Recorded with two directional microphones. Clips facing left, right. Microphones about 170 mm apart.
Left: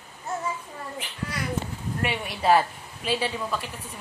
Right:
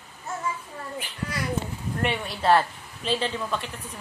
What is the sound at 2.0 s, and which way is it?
Speech, 10° left (ahead or behind).